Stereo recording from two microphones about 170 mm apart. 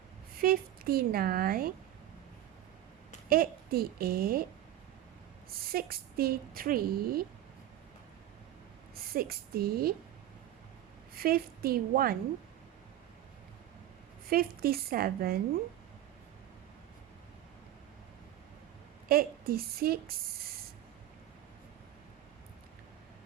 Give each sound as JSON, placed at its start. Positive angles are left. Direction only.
{"t": 0.3, "sound": "speech", "side_deg": -60}
{"t": 3.2, "sound": "speech", "side_deg": -60}
{"t": 5.6, "sound": "speech", "side_deg": -60}
{"t": 9.0, "sound": "a woman's voice", "side_deg": -60}
{"t": 11.1, "sound": "speech", "side_deg": -60}
{"t": 14.3, "sound": "speech", "side_deg": -60}
{"t": 19.0, "sound": "speech", "side_deg": -60}